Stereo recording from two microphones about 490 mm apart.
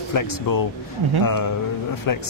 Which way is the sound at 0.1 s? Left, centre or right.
Left.